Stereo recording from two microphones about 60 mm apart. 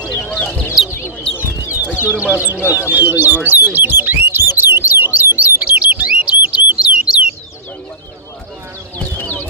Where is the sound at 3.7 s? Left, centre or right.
Right.